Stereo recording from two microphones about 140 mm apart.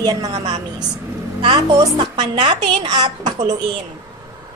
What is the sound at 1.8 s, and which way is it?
A child's voice, 30° right (ahead or behind).